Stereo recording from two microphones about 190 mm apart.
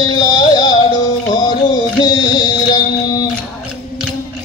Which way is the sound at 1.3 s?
20° left (ahead or behind).